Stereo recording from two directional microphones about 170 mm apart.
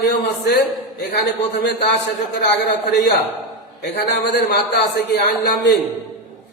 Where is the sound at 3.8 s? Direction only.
90° left; by 5.6 s 75° left (ahead or behind).